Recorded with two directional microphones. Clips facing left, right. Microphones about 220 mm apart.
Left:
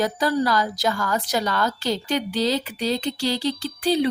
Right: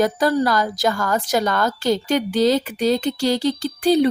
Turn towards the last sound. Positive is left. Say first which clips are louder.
# right 5 dB
turn(degrees=-45)  # may be behind; listen again after turning